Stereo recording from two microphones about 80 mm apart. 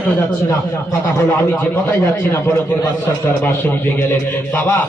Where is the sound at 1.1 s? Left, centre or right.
Left.